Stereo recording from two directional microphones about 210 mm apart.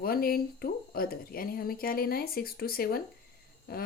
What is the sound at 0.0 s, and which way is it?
Speech, 45° left (ahead or behind).